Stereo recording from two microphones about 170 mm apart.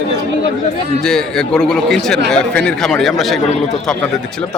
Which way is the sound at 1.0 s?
5° left (ahead or behind).